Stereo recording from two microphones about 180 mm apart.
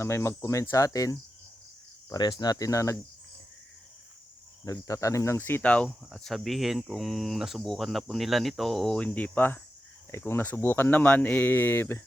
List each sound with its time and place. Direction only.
0.0 s speech: 15° left (ahead or behind)
2.0 s cricket: 20° left (ahead or behind)
4.6 s speech: 20° left (ahead or behind)